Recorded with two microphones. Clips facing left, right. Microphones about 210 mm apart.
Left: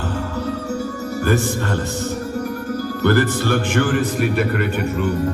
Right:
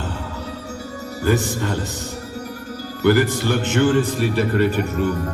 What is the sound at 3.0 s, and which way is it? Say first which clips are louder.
Speech: right 1 dB; 15° right (ahead or behind).